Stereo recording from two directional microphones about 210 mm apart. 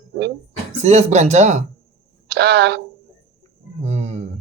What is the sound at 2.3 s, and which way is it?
Speech, 55° right (ahead or behind).